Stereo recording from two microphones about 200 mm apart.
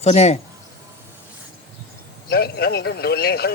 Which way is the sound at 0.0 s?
35° left (ahead or behind).